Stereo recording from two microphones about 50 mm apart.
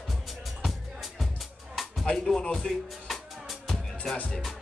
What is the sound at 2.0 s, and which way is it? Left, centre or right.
Speech, centre.